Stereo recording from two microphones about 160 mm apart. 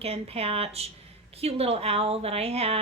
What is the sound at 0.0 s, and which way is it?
Speech, 40° right (ahead or behind).